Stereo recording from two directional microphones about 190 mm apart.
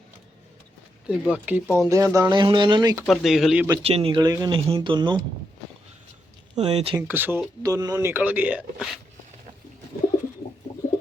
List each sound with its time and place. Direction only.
1.0 s speech: 5° right (ahead or behind); by 3.0 s 20° right (ahead or behind)
3.1 s speech: centre (ahead or behind)
3.8 s speech: 30° right (ahead or behind)
6.6 s speech: 30° right (ahead or behind)
6.9 s speech: 10° right (ahead or behind)